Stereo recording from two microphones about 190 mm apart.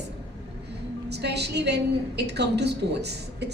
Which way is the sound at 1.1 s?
60° right (ahead or behind).